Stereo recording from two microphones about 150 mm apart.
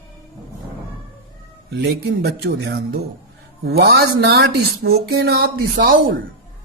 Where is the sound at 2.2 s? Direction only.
90° right.